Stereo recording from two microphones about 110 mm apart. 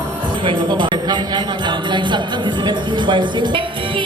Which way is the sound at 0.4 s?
45° right (ahead or behind).